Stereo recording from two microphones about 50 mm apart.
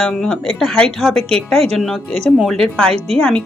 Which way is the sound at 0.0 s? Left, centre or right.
Centre.